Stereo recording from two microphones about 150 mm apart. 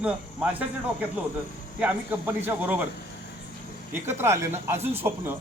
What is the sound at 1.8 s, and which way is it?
A man's voice, 15° right (ahead or behind).